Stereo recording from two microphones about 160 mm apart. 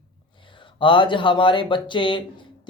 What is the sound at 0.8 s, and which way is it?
Speech, 30° left (ahead or behind).